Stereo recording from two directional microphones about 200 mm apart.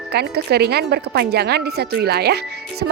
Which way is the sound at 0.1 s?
55° right (ahead or behind).